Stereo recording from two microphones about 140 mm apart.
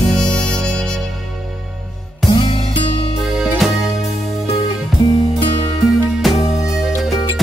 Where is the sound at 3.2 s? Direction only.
5° right (ahead or behind).